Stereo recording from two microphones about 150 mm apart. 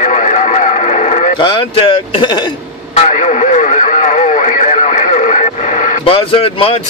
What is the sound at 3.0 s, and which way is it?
Radio, 50° left (ahead or behind).